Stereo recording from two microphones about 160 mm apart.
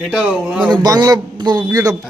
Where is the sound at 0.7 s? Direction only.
25° right (ahead or behind).